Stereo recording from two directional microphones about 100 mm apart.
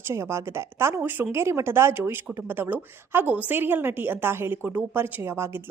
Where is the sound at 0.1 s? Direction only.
25° right (ahead or behind).